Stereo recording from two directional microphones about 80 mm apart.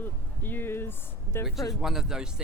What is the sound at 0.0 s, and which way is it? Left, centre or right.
Speech, left.